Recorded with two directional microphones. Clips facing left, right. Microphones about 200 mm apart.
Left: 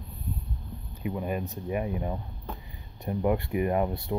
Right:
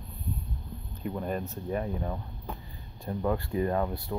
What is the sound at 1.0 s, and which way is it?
Speech, 5° left (ahead or behind).